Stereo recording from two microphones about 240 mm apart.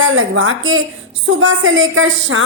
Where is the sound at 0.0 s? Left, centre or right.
Right.